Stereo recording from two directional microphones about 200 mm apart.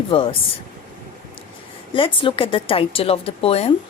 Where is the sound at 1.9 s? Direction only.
25° left (ahead or behind).